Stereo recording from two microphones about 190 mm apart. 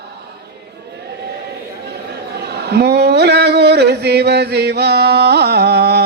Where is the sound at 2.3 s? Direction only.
60° right (ahead or behind).